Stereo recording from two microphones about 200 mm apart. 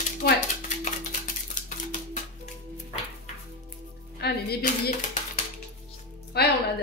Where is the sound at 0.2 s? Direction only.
50° left (ahead or behind).